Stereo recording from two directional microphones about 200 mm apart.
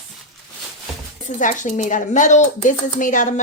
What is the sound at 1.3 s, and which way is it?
Speech, 40° left (ahead or behind).